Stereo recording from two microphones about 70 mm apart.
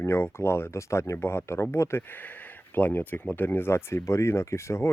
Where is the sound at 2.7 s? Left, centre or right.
Left.